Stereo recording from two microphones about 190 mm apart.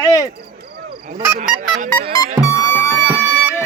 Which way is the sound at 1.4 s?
40° right (ahead or behind).